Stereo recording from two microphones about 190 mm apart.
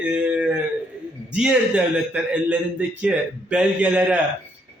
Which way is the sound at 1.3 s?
5° right (ahead or behind).